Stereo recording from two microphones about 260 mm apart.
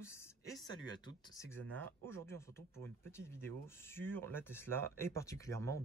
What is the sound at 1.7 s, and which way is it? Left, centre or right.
Speech, centre.